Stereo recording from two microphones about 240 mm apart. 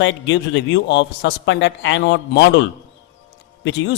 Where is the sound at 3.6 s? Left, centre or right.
Left.